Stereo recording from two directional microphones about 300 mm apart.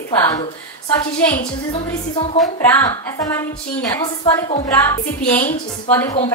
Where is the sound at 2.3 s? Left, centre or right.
Centre.